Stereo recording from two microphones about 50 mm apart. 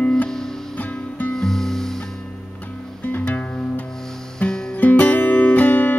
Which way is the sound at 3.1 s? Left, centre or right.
Left.